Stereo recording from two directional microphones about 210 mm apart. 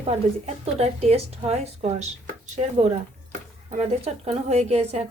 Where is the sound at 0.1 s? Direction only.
30° right (ahead or behind).